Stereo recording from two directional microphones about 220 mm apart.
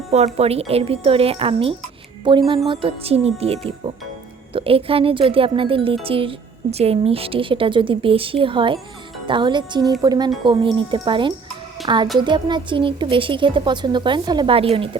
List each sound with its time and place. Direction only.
0.3 s speech: 25° right (ahead or behind)